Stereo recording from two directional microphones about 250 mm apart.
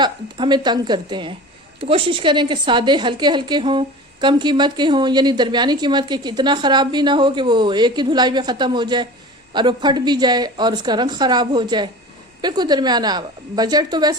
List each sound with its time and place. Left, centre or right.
0.0 s a woman's voice: centre